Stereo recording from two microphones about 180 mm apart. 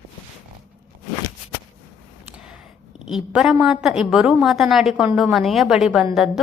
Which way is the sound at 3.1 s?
Centre (ahead or behind).